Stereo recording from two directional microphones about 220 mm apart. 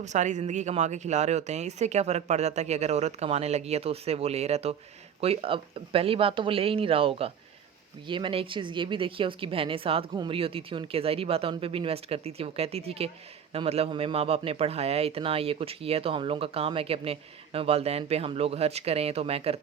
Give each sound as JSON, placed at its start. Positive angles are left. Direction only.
{"t": 0.0, "sound": "speech", "side_deg": -35}